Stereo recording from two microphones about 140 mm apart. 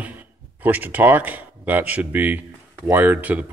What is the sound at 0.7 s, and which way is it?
Speech, 10° right (ahead or behind).